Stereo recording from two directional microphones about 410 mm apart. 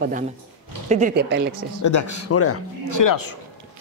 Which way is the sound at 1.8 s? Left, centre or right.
Left.